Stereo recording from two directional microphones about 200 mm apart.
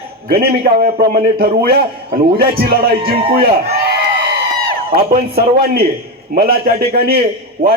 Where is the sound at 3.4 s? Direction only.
55° right (ahead or behind).